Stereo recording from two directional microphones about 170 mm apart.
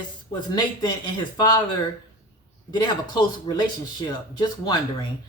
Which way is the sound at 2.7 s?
25° left (ahead or behind).